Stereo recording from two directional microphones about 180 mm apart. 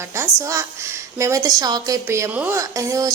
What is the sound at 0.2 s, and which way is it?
A woman's voice, 15° right (ahead or behind).